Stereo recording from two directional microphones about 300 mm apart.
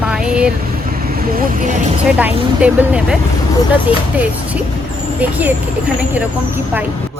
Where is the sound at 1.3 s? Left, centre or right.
Right.